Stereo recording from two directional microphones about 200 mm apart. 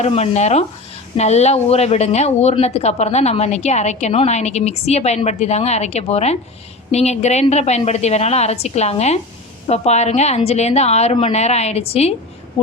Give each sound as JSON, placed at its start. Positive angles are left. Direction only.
{"t": 0.0, "sound": "speech", "side_deg": 35}